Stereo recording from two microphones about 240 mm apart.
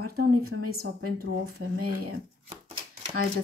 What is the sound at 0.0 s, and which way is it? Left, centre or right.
Speech, right.